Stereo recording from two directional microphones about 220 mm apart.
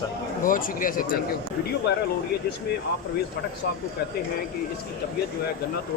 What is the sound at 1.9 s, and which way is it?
Speech, 50° left (ahead or behind).